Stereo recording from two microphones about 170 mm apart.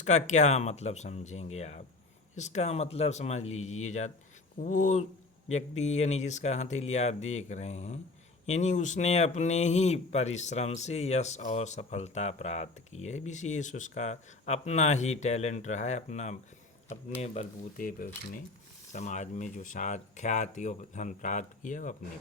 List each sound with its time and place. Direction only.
0.0 s speech: 45° left (ahead or behind)
18.9 s speech: 45° left (ahead or behind)